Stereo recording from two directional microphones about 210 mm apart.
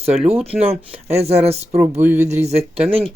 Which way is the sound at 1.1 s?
30° right (ahead or behind).